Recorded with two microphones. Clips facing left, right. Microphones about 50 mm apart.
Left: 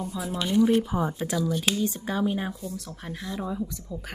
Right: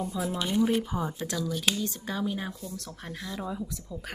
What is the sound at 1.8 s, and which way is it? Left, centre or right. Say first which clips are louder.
Speech: left 5 dB; left.